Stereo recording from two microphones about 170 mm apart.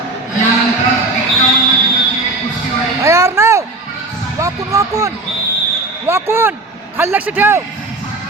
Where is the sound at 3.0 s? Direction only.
15° right (ahead or behind).